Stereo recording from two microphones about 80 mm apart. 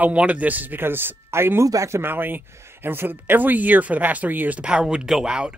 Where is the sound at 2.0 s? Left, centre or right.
Right.